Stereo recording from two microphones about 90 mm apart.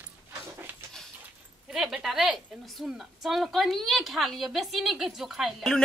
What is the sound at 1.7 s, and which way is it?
A woman's voice, 5° right (ahead or behind).